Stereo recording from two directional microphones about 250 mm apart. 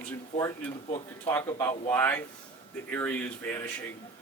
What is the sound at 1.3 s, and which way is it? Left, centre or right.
A man's voice, centre.